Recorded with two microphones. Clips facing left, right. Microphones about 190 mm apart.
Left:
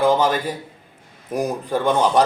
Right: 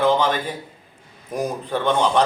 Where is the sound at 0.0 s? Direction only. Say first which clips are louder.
Left 1 dB; 10° left (ahead or behind).